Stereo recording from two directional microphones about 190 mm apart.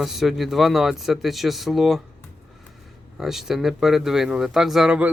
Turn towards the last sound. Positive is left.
turn(degrees=-5)  # may be behind; listen again after turning